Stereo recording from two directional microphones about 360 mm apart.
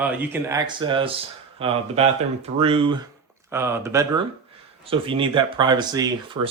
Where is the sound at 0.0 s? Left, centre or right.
Centre.